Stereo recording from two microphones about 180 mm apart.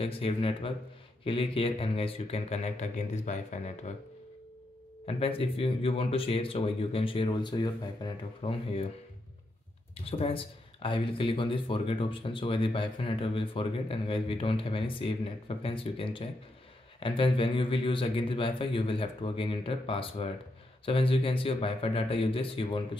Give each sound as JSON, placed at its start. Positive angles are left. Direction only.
{"t": 0.0, "sound": "speech", "side_deg": 30}
{"t": 5.0, "sound": "speech", "side_deg": 30}
{"t": 10.0, "sound": "speech", "side_deg": 30}